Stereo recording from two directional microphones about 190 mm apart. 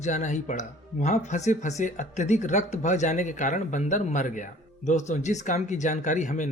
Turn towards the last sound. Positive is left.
turn(degrees=40)  # may be behind; listen again after turning